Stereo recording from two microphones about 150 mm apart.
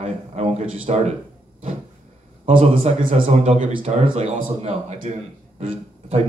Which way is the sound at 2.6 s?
45° right (ahead or behind).